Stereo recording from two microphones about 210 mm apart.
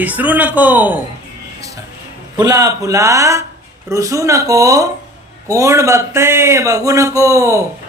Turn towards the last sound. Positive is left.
turn(degrees=-15)  # may be behind; listen again after turning